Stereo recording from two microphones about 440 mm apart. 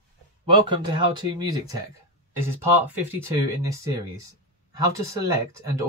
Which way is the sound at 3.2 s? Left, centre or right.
Centre.